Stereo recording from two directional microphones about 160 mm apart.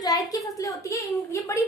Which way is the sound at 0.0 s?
25° left (ahead or behind).